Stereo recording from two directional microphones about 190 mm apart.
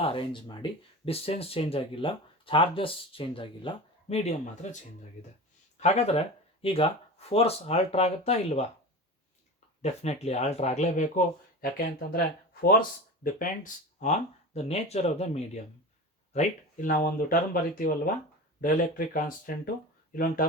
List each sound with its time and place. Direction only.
0.0 s speech: 30° left (ahead or behind)
5.8 s speech: 35° left (ahead or behind)
9.8 s speech: 35° left (ahead or behind)
11.6 s speech: 50° left (ahead or behind)
13.2 s speech: 45° left (ahead or behind)